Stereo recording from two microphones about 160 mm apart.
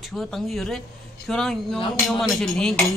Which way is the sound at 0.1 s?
Centre (ahead or behind).